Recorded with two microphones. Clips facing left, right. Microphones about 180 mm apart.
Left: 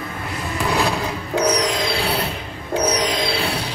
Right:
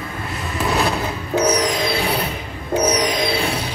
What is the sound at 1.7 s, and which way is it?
Train, 15° right (ahead or behind).